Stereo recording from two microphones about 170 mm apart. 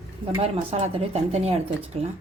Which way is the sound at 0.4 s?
35° right (ahead or behind).